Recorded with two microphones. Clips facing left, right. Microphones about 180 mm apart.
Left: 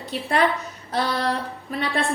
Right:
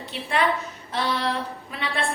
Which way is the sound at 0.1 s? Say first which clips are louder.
Left 3 dB; 40° left (ahead or behind).